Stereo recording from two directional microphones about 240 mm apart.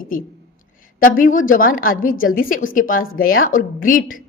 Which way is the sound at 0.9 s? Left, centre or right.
Left.